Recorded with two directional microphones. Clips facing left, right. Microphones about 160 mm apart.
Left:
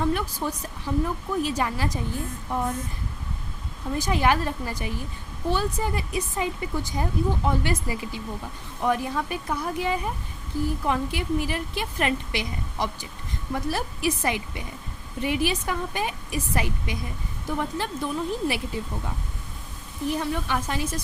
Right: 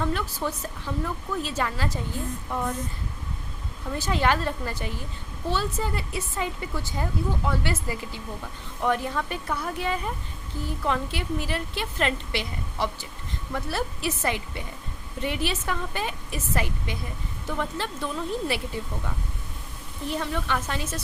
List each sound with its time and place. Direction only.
0.0 s a woman's voice: 15° left (ahead or behind)
3.9 s a woman's voice: 15° left (ahead or behind)
20.1 s a woman's voice: 15° left (ahead or behind)